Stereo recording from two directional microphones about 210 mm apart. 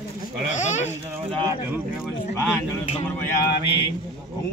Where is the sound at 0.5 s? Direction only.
35° left (ahead or behind).